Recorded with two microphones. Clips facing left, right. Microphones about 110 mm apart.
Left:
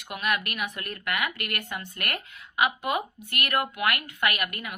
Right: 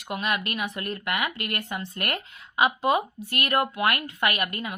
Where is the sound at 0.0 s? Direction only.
25° right (ahead or behind).